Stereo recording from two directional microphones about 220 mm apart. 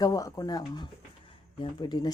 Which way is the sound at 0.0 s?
15° left (ahead or behind).